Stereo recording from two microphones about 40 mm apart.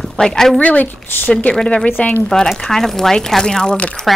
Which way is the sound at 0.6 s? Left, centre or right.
Left.